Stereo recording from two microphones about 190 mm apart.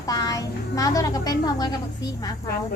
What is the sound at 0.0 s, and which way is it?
A child's voice, 20° left (ahead or behind).